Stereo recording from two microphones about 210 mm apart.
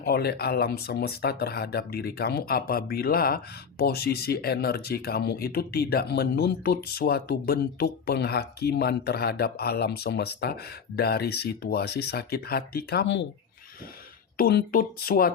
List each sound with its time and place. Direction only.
0.0 s speech: 50° left (ahead or behind)
14.3 s speech: 45° left (ahead or behind)